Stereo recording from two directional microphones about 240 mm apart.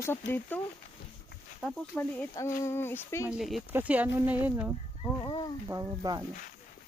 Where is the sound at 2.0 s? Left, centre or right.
Centre.